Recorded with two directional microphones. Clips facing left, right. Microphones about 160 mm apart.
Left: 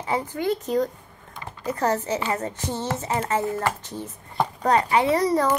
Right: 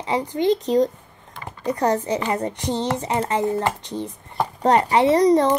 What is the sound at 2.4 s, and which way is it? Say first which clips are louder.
A child's voice: right 5 dB; 15° right (ahead or behind).